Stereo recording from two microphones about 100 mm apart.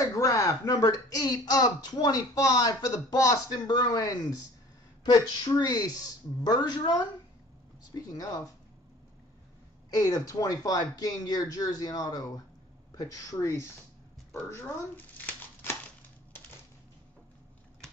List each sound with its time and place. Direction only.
0.0 s speech: 35° left (ahead or behind)
7.9 s speech: 35° left (ahead or behind)
9.9 s speech: 35° left (ahead or behind)